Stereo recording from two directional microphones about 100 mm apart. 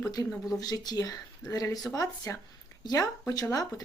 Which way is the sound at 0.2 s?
35° left (ahead or behind).